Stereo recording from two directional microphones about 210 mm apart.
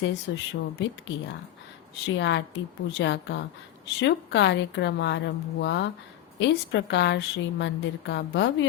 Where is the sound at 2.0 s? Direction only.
60° left (ahead or behind).